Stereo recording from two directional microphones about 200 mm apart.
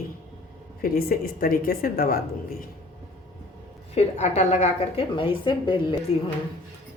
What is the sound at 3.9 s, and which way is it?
A woman's voice, 35° left (ahead or behind).